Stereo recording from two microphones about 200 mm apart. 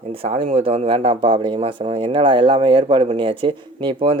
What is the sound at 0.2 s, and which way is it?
Speech, 30° right (ahead or behind).